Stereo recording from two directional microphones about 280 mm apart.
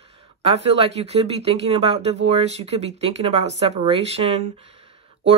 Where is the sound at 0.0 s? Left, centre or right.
Centre.